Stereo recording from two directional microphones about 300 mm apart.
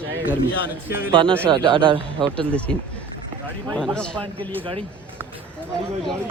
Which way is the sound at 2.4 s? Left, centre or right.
Centre.